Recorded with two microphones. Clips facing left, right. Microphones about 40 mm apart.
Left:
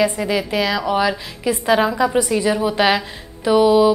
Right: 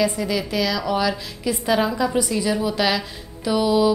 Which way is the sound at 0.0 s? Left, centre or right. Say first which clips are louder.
Left 3 dB; left.